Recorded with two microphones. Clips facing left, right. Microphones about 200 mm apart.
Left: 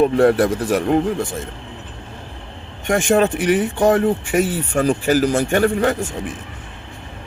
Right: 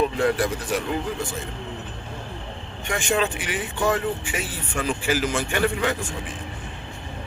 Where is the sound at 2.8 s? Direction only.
45° left (ahead or behind).